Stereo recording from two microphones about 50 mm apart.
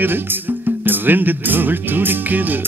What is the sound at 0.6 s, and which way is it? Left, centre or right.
Speech, right.